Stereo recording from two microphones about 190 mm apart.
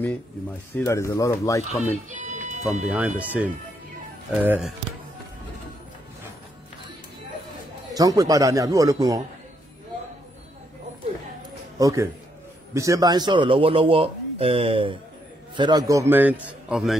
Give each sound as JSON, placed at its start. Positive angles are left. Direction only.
{"t": 0.7, "sound": "speech", "side_deg": 15}
{"t": 2.0, "sound": "music", "side_deg": -40}
{"t": 2.9, "sound": "a man's voice", "side_deg": -5}
{"t": 7.9, "sound": "speech", "side_deg": -20}
{"t": 11.8, "sound": "a man's voice", "side_deg": -15}